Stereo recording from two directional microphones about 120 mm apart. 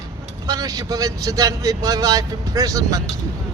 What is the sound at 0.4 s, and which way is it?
Speech, 30° right (ahead or behind).